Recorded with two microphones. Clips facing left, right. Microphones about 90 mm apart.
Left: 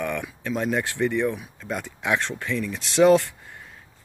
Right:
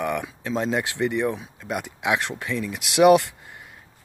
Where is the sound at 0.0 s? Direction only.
20° right (ahead or behind).